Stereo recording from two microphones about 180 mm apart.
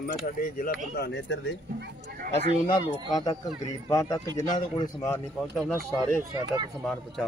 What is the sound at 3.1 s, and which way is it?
Speech, 20° left (ahead or behind).